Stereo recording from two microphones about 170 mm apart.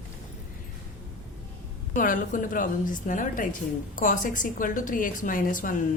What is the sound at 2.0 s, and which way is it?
A woman's voice, 50° left (ahead or behind).